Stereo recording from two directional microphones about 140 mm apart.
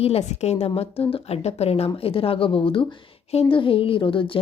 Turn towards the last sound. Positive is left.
turn(degrees=40)  # may be behind; listen again after turning